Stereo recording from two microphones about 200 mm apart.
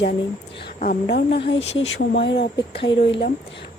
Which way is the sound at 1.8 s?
60° left (ahead or behind).